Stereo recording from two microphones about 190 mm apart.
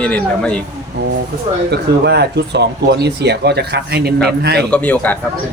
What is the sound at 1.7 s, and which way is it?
Speech, 60° right (ahead or behind).